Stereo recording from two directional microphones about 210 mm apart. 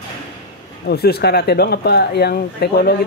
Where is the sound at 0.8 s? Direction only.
50° left (ahead or behind).